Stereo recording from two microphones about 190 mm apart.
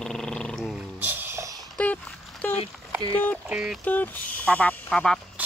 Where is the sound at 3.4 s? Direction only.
Centre (ahead or behind).